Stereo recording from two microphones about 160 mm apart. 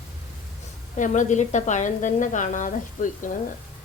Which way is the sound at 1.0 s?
50° left (ahead or behind).